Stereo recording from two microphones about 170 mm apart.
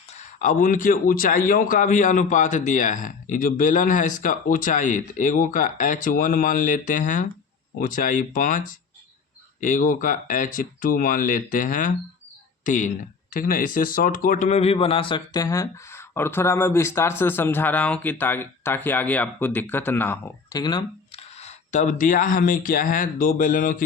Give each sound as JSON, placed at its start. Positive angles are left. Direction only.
{"t": 0.1, "sound": "speech", "side_deg": 45}